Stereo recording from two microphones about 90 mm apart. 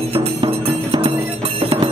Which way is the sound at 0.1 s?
90° right.